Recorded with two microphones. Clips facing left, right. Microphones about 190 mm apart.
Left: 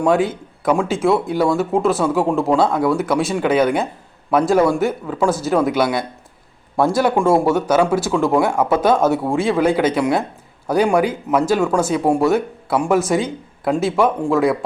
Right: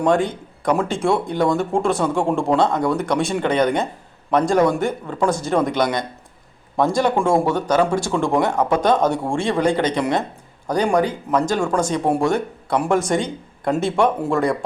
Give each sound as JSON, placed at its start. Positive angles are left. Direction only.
{"t": 0.0, "sound": "speech", "side_deg": 5}